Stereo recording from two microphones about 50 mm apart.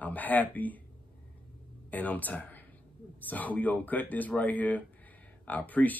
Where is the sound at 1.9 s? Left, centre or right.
Left.